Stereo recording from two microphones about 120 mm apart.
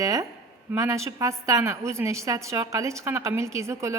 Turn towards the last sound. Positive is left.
turn(degrees=-25)  # may be behind; listen again after turning